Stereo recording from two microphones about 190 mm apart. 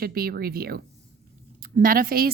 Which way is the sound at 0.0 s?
50° right (ahead or behind).